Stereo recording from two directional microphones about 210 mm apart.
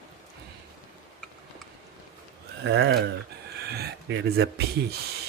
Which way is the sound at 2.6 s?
55° right (ahead or behind).